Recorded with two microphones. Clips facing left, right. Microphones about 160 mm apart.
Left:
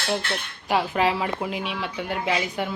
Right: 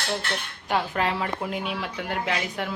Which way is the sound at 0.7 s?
5° left (ahead or behind).